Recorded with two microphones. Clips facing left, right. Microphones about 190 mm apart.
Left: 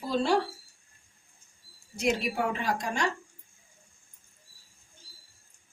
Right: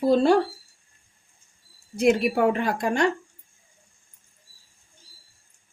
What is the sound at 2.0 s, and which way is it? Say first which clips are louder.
A woman's voice: right 8 dB; 60° right (ahead or behind).